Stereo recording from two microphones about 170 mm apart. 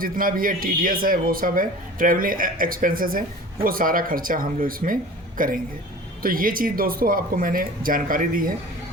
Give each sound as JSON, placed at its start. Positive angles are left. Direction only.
{"t": 0.0, "sound": "speech", "side_deg": -55}